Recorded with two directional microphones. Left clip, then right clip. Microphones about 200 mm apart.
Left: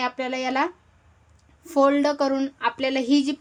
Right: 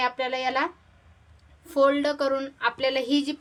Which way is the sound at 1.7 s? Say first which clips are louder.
Left 2 dB; 35° left (ahead or behind).